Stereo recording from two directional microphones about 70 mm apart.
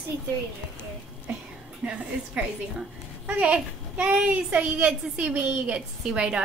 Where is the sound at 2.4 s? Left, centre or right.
Centre.